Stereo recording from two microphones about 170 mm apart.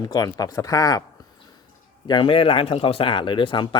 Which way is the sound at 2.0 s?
30° left (ahead or behind).